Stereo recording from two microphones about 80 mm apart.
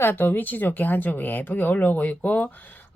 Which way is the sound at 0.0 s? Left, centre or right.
Left.